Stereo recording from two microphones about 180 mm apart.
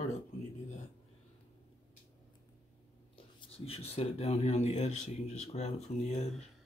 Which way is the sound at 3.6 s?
35° left (ahead or behind).